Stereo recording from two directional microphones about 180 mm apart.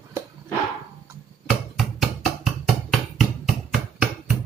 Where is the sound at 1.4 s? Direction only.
Centre (ahead or behind).